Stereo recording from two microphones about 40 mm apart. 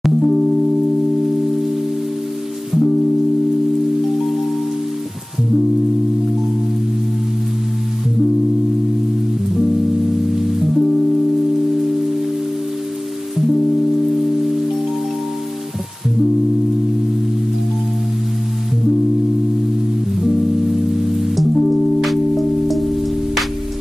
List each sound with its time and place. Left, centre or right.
0.0 s music: centre
2.7 s music: centre
9.5 s music: centre
13.4 s music: centre
20.2 s music: centre